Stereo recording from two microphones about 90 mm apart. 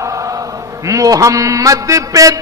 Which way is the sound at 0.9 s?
40° right (ahead or behind).